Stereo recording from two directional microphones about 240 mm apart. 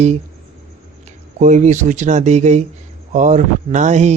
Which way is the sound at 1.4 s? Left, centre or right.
Right.